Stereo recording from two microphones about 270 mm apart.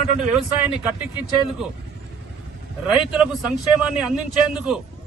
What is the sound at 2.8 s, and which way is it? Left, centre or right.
A man's voice, centre.